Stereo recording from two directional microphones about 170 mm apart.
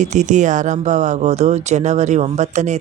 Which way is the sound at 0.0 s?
45° right (ahead or behind).